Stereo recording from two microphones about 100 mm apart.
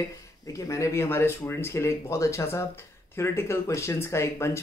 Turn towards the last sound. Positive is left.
turn(degrees=25)  # may be behind; listen again after turning